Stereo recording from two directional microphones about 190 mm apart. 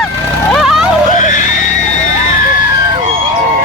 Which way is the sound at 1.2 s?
40° left (ahead or behind).